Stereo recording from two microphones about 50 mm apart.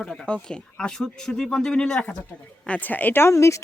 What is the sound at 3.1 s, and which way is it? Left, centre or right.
Speech, left.